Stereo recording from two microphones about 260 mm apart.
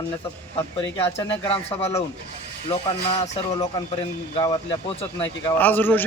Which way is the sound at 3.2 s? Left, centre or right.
Centre.